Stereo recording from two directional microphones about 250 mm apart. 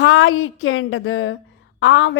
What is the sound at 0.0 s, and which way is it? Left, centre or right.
A woman's voice, left.